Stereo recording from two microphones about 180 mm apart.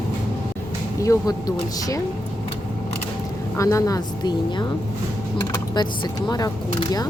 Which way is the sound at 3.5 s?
15° left (ahead or behind).